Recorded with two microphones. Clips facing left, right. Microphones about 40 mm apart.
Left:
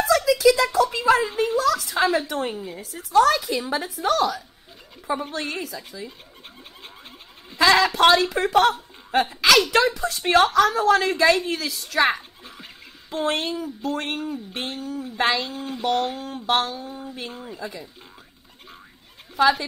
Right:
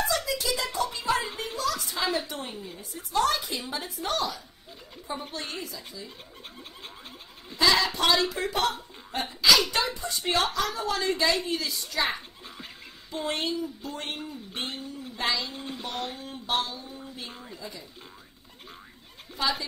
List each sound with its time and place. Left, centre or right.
0.0 s a sound: left
0.9 s a woman's voice: left
1.2 s speech: left
1.6 s a woman's voice: left
5.3 s a woman's voice: left
7.5 s a woman's voice: left
13.1 s a woman's voice: left
15.5 s speech: centre
15.8 s a woman's voice: left
16.2 s a woman's voice: left
16.7 s speech: left
17.3 s speech: left
17.6 s speech: left